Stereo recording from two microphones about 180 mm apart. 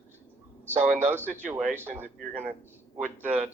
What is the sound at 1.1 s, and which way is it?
Speech, 10° right (ahead or behind).